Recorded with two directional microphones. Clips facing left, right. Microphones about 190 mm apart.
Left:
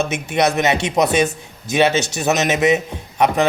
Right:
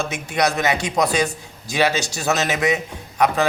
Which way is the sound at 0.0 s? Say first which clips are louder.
Left 3 dB; 20° left (ahead or behind).